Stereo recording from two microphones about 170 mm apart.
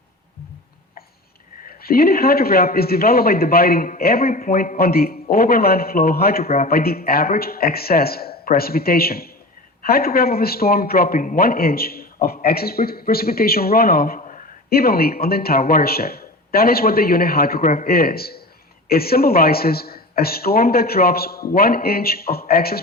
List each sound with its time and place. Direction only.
1.6 s speech: 60° left (ahead or behind)
14.2 s speech: 45° left (ahead or behind); by 22.8 s 60° left (ahead or behind)